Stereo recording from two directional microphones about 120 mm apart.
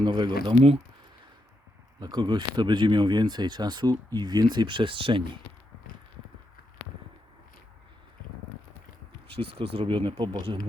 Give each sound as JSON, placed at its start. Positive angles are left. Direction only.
{"t": 0.0, "sound": "speech", "side_deg": -40}
{"t": 2.0, "sound": "speech", "side_deg": -35}
{"t": 9.3, "sound": "speech", "side_deg": -50}